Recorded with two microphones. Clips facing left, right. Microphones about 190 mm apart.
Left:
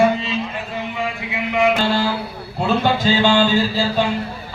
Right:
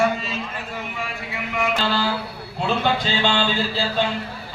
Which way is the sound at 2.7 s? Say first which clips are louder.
Left 5 dB; 45° left (ahead or behind).